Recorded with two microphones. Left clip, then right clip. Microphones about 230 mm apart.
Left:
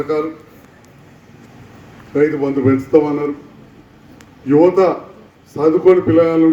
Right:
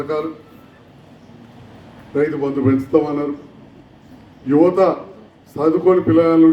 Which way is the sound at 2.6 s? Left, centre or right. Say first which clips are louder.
Left 3 dB; left.